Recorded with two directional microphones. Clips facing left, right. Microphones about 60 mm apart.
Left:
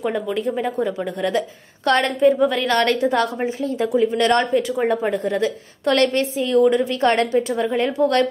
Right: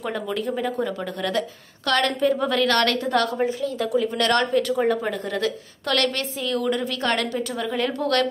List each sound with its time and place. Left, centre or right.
0.0 s a woman's voice: centre
2.3 s a woman's voice: centre
2.6 s a woman's voice: centre
4.8 s a woman's voice: left